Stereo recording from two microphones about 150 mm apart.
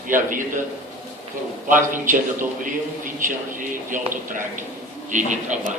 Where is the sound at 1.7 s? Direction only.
60° right (ahead or behind).